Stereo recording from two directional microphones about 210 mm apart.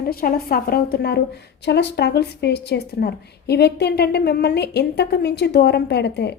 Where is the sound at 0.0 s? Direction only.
45° left (ahead or behind).